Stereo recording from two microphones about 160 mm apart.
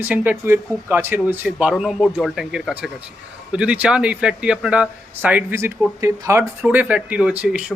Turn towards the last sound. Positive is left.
turn(degrees=-5)  # may be behind; listen again after turning